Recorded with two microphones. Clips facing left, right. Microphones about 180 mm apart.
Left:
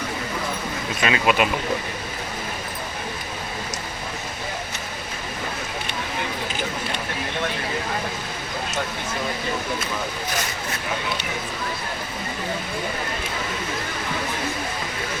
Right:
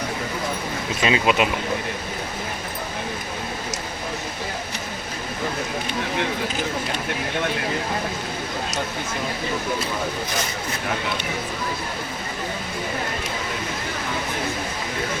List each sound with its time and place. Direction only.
1.0 s speech: 20° right (ahead or behind)